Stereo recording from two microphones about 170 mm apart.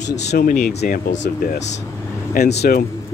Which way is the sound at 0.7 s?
70° left (ahead or behind).